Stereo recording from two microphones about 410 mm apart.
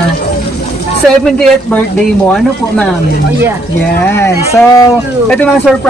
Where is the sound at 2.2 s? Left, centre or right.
Centre.